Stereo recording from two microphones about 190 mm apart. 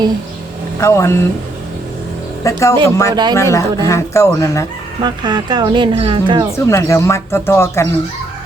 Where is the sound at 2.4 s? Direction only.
15° left (ahead or behind).